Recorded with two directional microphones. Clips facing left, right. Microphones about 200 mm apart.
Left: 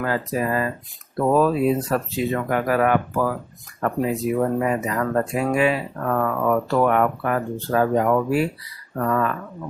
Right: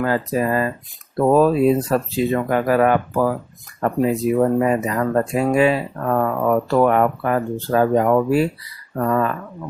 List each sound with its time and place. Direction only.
0.0 s speech: 35° right (ahead or behind)